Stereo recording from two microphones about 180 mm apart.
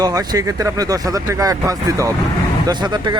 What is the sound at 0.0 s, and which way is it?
Speech, 20° right (ahead or behind).